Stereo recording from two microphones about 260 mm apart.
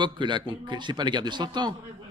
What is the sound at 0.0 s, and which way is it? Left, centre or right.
A man's voice, centre.